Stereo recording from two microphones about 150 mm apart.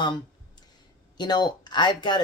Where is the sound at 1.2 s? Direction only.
30° left (ahead or behind).